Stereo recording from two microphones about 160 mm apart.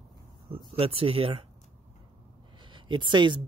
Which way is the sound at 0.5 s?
35° right (ahead or behind).